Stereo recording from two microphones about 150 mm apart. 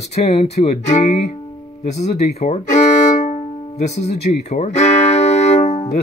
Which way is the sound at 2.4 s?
50° left (ahead or behind).